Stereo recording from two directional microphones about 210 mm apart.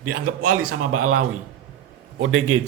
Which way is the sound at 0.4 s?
90° right.